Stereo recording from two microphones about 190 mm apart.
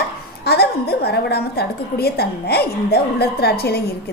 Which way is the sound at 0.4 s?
60° left (ahead or behind).